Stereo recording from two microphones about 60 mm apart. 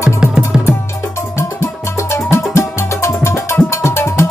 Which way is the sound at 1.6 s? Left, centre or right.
Left.